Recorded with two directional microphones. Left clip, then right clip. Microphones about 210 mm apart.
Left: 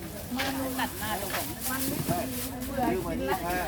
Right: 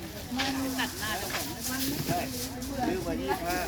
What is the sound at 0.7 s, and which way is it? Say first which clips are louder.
Hiss: even; 60° left (ahead or behind).